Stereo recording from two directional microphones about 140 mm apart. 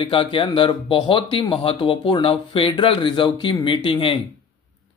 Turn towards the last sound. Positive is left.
turn(degrees=40)  # may be behind; listen again after turning